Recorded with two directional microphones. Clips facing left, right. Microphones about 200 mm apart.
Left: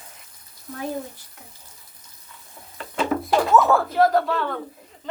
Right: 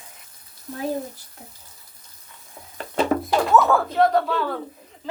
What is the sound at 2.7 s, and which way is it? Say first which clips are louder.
Music: right 3 dB; 40° right (ahead or behind).